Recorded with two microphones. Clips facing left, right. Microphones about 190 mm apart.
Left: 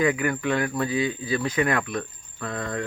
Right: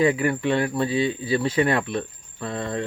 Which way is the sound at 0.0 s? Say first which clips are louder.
Right 3 dB; 30° right (ahead or behind).